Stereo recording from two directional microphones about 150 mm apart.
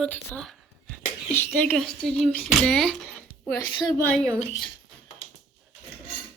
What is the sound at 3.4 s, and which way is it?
Speech, 20° left (ahead or behind).